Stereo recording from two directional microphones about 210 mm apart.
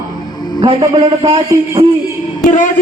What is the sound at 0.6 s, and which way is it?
A man's voice, 25° right (ahead or behind).